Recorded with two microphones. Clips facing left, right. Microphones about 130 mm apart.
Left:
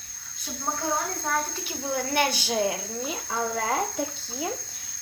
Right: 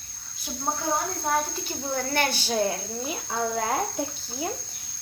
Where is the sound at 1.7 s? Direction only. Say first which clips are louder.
Left 2 dB; 10° left (ahead or behind).